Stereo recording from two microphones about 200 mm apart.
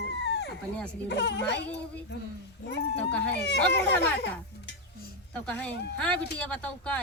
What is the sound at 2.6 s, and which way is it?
Speech, 60° left (ahead or behind).